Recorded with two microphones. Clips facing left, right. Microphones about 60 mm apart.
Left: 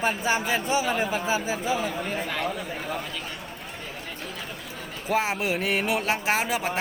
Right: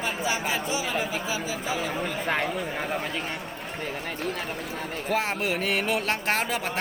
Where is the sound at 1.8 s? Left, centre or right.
Right.